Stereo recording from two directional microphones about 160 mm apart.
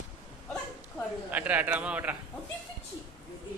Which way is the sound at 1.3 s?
10° right (ahead or behind).